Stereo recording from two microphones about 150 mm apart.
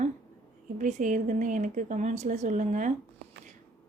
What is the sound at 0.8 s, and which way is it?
Speech, 55° right (ahead or behind).